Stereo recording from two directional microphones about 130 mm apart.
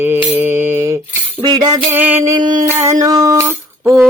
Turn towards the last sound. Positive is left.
turn(degrees=-20)  # may be behind; listen again after turning